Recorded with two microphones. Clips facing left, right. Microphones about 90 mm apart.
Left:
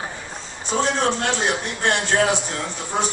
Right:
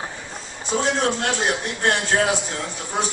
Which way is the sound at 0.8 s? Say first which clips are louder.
Even; centre (ahead or behind).